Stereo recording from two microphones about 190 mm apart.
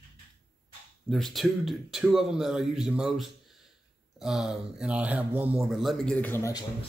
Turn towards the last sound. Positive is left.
turn(degrees=15)  # may be behind; listen again after turning